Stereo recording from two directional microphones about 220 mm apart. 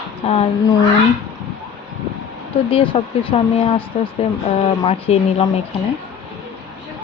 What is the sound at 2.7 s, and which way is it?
Speech, 25° left (ahead or behind).